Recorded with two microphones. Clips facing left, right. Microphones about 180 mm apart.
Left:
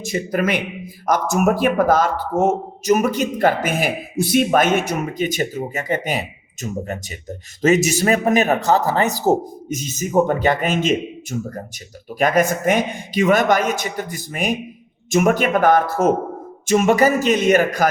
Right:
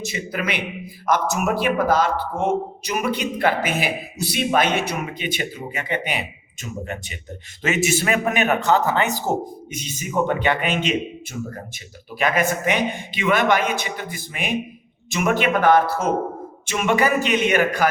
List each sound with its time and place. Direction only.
0.0 s speech: 45° left (ahead or behind)